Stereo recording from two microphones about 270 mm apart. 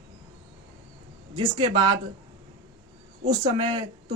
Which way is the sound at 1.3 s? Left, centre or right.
Centre.